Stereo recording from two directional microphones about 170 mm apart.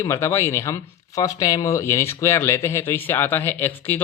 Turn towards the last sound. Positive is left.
turn(degrees=10)  # may be behind; listen again after turning